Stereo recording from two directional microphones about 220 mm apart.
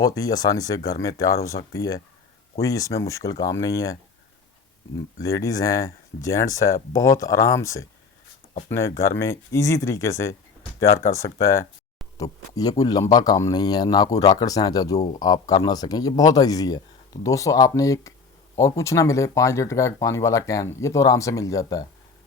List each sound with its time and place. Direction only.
0.2 s speech: 15° left (ahead or behind)
5.2 s speech: 15° left (ahead or behind)